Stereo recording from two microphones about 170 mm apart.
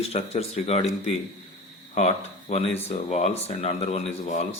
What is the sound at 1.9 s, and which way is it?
Speech, 40° left (ahead or behind).